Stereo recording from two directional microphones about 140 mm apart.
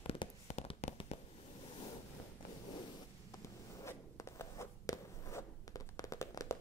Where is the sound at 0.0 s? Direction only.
50° left (ahead or behind).